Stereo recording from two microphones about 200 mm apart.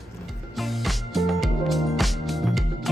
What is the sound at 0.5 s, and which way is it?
Music, centre (ahead or behind).